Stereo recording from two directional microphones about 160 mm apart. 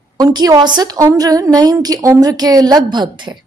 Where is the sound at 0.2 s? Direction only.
25° right (ahead or behind).